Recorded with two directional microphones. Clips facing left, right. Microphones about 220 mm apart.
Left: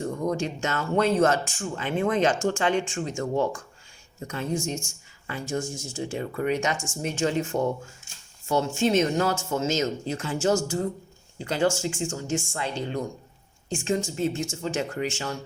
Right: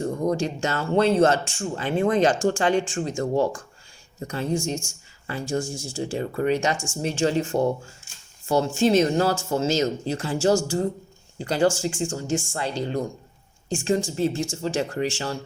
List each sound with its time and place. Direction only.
0.0 s speech: 35° right (ahead or behind)